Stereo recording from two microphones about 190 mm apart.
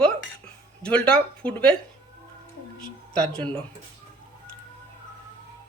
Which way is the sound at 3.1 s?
5° left (ahead or behind).